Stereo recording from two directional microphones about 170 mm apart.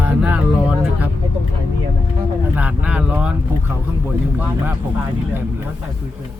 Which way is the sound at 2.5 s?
10° right (ahead or behind).